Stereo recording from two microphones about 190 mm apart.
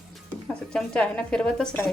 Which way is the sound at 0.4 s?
5° left (ahead or behind).